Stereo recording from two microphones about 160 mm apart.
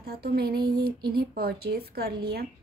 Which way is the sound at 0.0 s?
75° right (ahead or behind).